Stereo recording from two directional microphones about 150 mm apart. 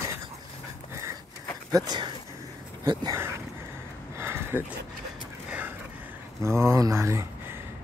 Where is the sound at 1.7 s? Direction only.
25° right (ahead or behind).